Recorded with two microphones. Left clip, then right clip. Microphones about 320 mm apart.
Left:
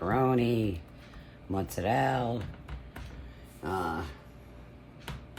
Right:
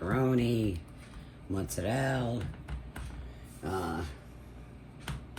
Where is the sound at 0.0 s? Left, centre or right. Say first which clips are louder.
Left 3 dB; left.